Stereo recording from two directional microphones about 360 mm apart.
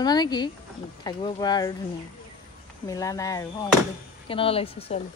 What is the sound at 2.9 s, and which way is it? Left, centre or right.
Speech, centre.